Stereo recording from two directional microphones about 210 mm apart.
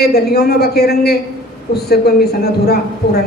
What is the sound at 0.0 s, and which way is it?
A woman's voice, 50° left (ahead or behind).